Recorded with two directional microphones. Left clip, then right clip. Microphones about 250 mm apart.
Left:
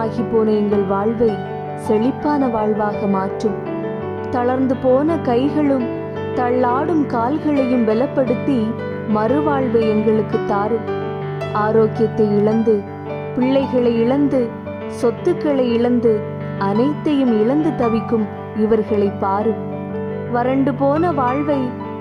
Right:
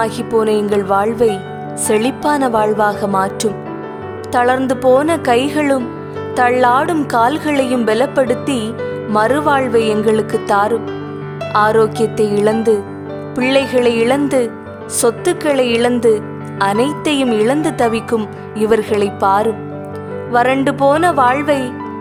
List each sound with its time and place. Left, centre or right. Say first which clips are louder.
0.0 s speech: right 3 dB; right
11.5 s speech: right 4 dB; right